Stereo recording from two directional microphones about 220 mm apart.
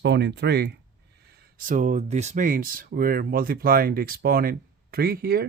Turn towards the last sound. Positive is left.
turn(degrees=-45)  # may be behind; listen again after turning